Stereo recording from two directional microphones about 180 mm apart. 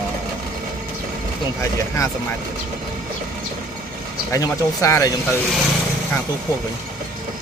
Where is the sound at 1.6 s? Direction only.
15° left (ahead or behind).